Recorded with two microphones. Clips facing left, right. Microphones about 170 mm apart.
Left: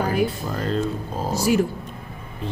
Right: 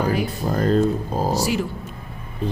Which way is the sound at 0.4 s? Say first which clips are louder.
Right 6 dB; 45° right (ahead or behind).